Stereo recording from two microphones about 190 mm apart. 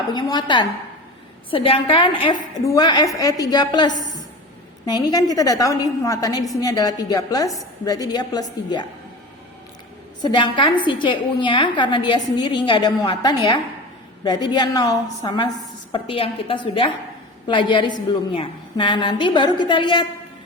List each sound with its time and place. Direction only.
0.1 s a woman's voice: 20° left (ahead or behind)
10.2 s a woman's voice: 25° left (ahead or behind)